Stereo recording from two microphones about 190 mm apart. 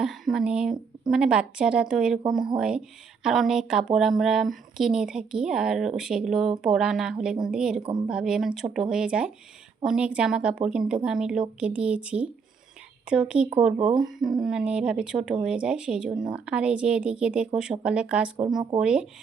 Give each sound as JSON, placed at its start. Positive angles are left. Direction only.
{"t": 0.0, "sound": "speech", "side_deg": 0}
{"t": 7.8, "sound": "a woman's voice", "side_deg": -30}
{"t": 8.0, "sound": "speech", "side_deg": -5}